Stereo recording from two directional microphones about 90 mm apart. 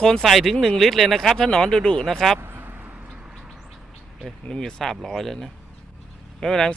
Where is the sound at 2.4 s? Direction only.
25° right (ahead or behind); by 3.8 s 5° right (ahead or behind).